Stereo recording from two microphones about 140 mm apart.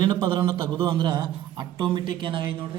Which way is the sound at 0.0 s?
35° right (ahead or behind).